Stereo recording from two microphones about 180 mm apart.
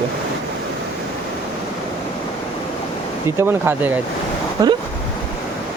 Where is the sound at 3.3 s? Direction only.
10° right (ahead or behind).